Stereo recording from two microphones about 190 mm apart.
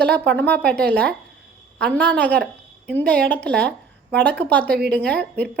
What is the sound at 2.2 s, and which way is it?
Speech, 5° left (ahead or behind).